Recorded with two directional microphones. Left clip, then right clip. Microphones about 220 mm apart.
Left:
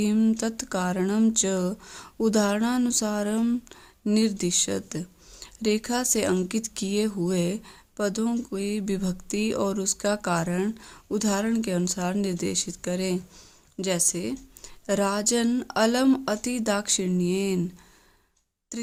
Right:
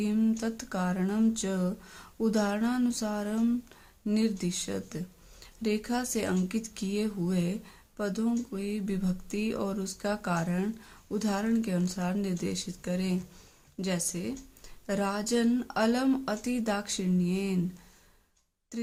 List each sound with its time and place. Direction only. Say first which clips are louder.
0.0 s speech: left 5 dB; 50° left (ahead or behind)
18.7 s speech: left 2 dB; 50° left (ahead or behind)